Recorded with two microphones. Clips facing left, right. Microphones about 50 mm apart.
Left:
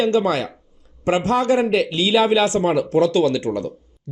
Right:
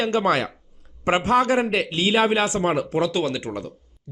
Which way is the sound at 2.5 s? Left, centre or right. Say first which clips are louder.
Left 4 dB; right.